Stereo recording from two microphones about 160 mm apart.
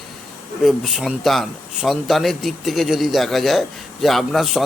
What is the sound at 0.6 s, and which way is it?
Speech, centre (ahead or behind).